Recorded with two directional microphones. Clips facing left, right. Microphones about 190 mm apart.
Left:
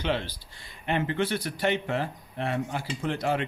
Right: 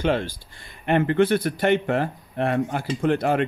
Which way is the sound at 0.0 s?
50° right (ahead or behind).